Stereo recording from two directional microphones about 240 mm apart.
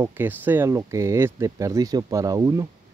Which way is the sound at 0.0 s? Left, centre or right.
Centre.